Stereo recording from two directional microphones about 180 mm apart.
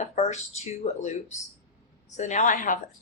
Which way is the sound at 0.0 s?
40° left (ahead or behind).